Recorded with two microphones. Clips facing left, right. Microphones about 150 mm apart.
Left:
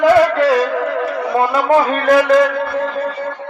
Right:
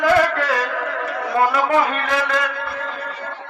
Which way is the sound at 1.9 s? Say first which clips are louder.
Left 10 dB; 45° left (ahead or behind).